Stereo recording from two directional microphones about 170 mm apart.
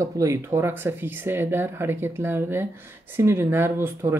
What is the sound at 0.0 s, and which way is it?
Speech, 20° right (ahead or behind).